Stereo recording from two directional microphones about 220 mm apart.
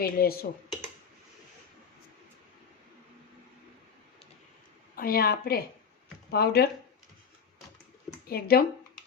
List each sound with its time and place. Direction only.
0.0 s a woman's voice: 45° left (ahead or behind)
4.9 s a woman's voice: 40° left (ahead or behind)
8.3 s a woman's voice: 45° left (ahead or behind)